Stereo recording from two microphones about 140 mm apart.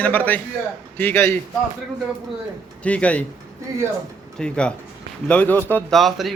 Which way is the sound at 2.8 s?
10° left (ahead or behind).